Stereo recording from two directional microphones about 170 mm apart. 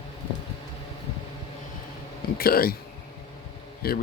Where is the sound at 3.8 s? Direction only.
65° left (ahead or behind).